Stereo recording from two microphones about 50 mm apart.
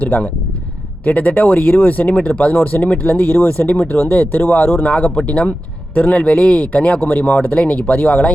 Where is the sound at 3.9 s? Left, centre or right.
Left.